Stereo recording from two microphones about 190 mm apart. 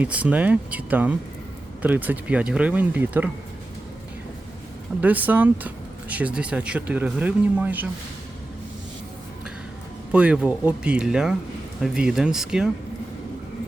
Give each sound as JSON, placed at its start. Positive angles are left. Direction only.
{"t": 0.0, "sound": "speech", "side_deg": -5}
{"t": 4.9, "sound": "speech", "side_deg": -10}
{"t": 10.1, "sound": "speech", "side_deg": -5}